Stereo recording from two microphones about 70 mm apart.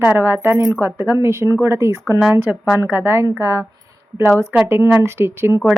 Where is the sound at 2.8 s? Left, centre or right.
Right.